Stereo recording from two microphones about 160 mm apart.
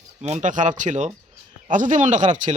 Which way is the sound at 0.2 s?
45° right (ahead or behind).